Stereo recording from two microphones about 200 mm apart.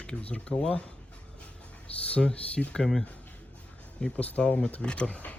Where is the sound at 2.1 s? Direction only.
5° left (ahead or behind).